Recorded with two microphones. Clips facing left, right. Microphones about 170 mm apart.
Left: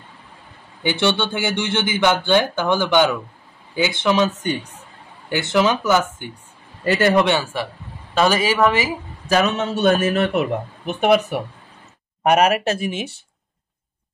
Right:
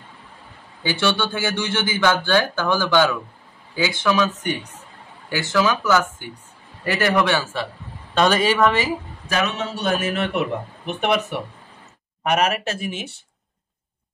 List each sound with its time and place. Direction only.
0.8 s speech: 20° left (ahead or behind)
8.1 s speech: 5° left (ahead or behind)
9.3 s a man's voice: 40° left (ahead or behind)